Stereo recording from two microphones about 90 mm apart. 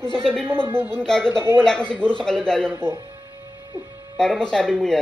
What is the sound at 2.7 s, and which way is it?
Speech, 25° right (ahead or behind).